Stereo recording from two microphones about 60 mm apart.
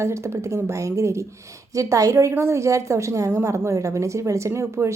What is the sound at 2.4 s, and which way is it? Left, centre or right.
A woman's voice, right.